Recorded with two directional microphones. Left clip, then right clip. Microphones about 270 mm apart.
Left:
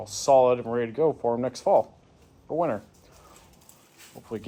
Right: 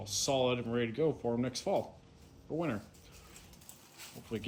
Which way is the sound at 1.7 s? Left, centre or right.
Left.